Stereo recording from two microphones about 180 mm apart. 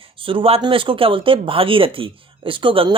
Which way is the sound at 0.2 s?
30° right (ahead or behind).